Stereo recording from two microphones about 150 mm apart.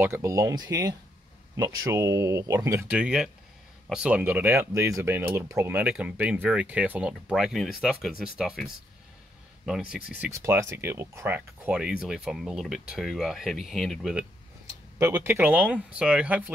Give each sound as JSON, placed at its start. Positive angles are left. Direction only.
{"t": 0.0, "sound": "speech", "side_deg": -20}
{"t": 10.3, "sound": "speech", "side_deg": -20}
{"t": 15.0, "sound": "speech", "side_deg": -15}